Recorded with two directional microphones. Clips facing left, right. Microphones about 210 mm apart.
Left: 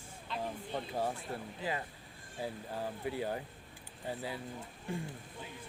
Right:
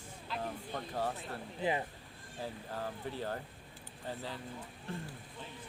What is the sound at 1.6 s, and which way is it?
Speech, 20° right (ahead or behind).